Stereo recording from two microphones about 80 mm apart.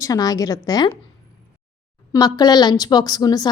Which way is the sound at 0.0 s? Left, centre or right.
Left.